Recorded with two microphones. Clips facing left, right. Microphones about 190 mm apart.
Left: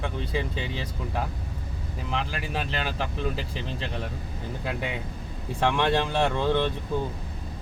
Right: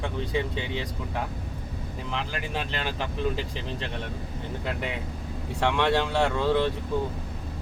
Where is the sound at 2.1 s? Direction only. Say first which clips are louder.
Left 1 dB; centre (ahead or behind).